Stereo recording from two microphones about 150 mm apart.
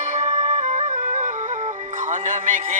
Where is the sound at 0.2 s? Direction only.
50° right (ahead or behind).